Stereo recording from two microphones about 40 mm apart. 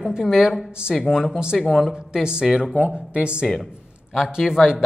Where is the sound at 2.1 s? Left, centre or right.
Centre.